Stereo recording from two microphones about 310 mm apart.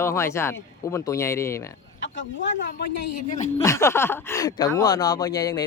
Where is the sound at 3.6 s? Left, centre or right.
Centre.